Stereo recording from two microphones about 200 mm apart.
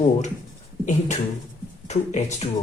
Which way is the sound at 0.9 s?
35° left (ahead or behind).